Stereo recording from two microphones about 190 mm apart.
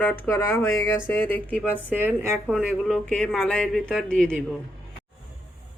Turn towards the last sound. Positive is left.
turn(degrees=5)  # may be behind; listen again after turning